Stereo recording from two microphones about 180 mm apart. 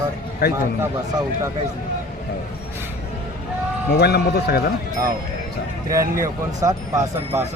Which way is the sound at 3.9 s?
65° left (ahead or behind).